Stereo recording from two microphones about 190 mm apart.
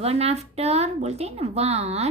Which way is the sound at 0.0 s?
30° right (ahead or behind).